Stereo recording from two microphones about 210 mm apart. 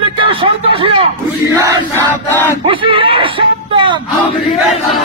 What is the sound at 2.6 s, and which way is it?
Speech, 25° right (ahead or behind).